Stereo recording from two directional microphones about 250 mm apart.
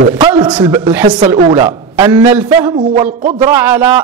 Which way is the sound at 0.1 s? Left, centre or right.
Centre.